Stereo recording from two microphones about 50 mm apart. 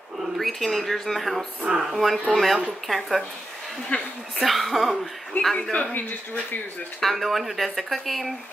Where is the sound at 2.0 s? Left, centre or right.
Centre.